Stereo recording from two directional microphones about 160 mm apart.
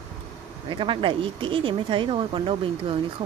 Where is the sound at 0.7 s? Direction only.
30° right (ahead or behind).